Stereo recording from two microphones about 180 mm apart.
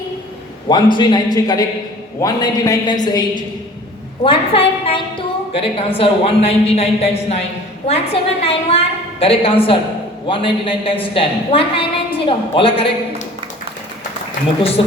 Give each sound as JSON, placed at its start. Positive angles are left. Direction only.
{"t": 0.7, "sound": "a man's voice", "side_deg": 25}